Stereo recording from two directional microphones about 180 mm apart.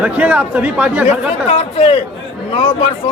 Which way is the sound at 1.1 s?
35° left (ahead or behind).